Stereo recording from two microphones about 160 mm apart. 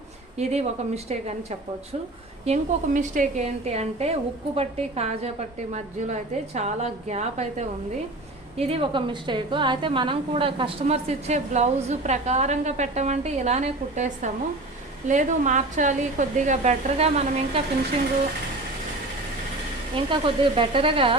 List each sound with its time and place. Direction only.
1.1 s a woman's voice: 40° right (ahead or behind)
20.1 s a woman's voice: 30° right (ahead or behind)